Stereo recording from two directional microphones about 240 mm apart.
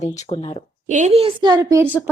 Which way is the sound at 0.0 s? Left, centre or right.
Left.